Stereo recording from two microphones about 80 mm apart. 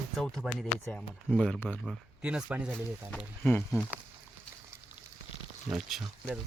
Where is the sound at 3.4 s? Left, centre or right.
Left.